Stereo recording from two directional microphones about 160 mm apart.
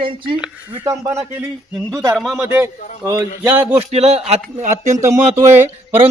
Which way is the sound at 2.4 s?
15° right (ahead or behind).